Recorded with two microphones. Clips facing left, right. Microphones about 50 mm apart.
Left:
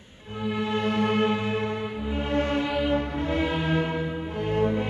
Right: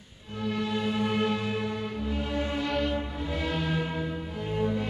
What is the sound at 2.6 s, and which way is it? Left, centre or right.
Music, centre.